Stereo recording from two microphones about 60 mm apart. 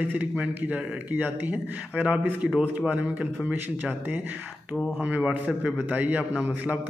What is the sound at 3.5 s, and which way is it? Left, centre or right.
A man's voice, right.